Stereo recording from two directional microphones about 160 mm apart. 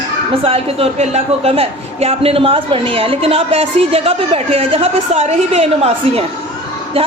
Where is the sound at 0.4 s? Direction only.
35° right (ahead or behind).